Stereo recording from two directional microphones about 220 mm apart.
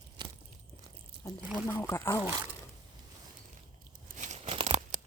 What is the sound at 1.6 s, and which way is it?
Speech, 15° left (ahead or behind).